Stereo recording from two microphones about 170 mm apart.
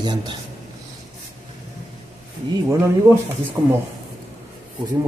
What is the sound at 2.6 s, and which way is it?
Speech, 15° right (ahead or behind).